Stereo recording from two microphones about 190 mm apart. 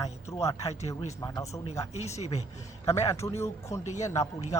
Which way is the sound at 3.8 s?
40° left (ahead or behind).